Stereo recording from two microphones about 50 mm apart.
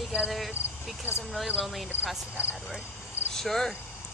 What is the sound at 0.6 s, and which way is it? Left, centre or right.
Cricket, left.